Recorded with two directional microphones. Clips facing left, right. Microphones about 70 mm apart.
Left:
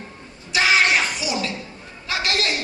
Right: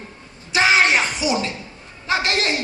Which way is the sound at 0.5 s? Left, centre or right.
Right.